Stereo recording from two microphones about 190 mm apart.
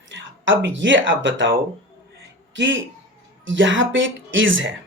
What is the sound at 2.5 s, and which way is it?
Speech, 75° right (ahead or behind).